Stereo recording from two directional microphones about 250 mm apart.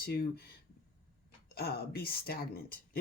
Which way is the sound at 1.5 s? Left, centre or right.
Left.